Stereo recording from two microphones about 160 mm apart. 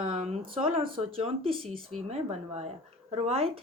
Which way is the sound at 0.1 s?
35° right (ahead or behind).